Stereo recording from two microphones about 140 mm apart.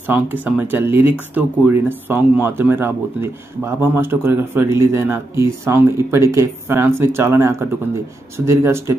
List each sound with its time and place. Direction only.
0.0 s speech: 15° right (ahead or behind)